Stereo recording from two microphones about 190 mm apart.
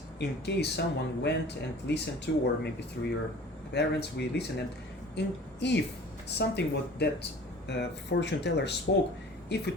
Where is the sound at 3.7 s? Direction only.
60° left (ahead or behind).